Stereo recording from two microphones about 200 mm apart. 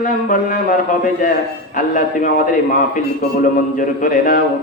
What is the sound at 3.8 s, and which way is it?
Speech, 45° left (ahead or behind).